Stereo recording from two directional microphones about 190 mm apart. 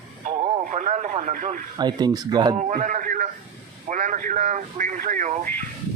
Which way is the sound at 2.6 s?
40° right (ahead or behind).